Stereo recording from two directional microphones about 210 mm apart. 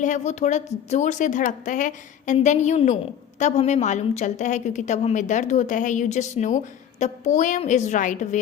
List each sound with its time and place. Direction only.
0.0 s speech: 35° left (ahead or behind)